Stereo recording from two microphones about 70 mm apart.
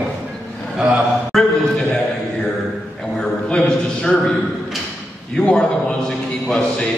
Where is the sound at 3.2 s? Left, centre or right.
Centre.